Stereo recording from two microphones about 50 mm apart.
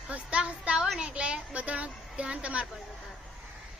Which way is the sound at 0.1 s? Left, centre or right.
Right.